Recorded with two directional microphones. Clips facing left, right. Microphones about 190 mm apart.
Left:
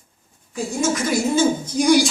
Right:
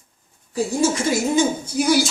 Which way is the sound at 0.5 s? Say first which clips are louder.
Right 2 dB; 30° right (ahead or behind).